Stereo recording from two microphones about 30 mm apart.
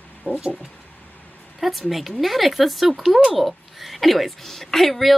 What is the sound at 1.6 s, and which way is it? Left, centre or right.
A woman's voice, centre.